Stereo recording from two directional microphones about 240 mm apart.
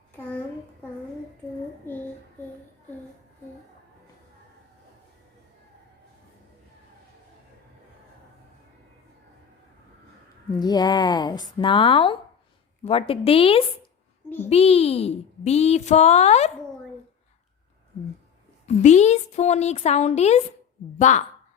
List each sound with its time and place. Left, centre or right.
1.9 s child singing: centre
10.6 s speech: centre
18.6 s a woman's voice: left